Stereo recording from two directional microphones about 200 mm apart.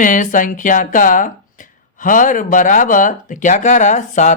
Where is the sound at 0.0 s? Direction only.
40° left (ahead or behind).